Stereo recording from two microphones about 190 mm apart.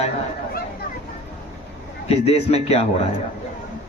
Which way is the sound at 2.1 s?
35° left (ahead or behind).